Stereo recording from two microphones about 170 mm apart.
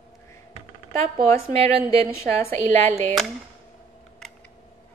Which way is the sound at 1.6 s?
35° right (ahead or behind).